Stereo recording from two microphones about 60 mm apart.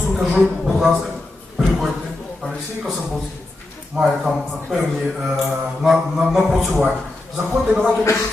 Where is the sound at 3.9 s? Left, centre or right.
Centre.